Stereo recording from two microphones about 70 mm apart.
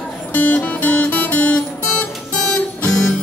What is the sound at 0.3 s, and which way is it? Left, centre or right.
Music, left.